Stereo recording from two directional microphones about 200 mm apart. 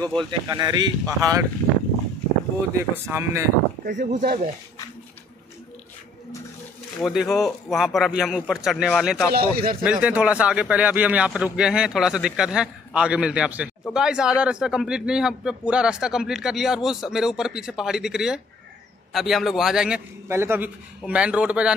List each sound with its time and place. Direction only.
0.0 s speech: centre (ahead or behind)
0.3 s speech: 20° right (ahead or behind)
2.9 s speech: 10° right (ahead or behind)
3.8 s speech: 40° right (ahead or behind)
7.0 s speech: centre (ahead or behind)
9.3 s speech: 50° right (ahead or behind)
9.8 s speech: 5° right (ahead or behind)